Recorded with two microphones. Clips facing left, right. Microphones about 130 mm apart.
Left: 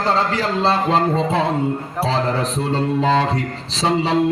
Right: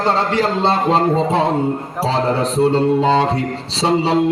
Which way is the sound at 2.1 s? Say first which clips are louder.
Right 5 dB; 30° right (ahead or behind).